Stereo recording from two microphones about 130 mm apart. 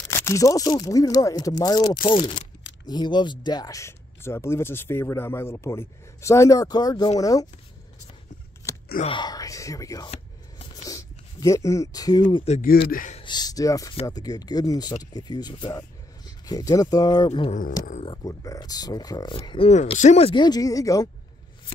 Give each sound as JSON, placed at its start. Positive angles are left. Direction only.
{"t": 0.1, "sound": "speech", "side_deg": 25}
{"t": 9.0, "sound": "speech", "side_deg": 35}
{"t": 12.4, "sound": "speech", "side_deg": 70}
{"t": 13.2, "sound": "speech", "side_deg": 35}
{"t": 17.3, "sound": "speech", "side_deg": 50}
{"t": 18.2, "sound": "speech", "side_deg": 25}
{"t": 19.4, "sound": "speech", "side_deg": 40}
{"t": 19.7, "sound": "speech", "side_deg": 60}
{"t": 20.3, "sound": "speech", "side_deg": 30}